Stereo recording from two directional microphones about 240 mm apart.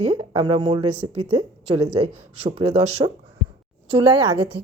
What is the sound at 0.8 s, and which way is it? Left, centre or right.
Speech, right.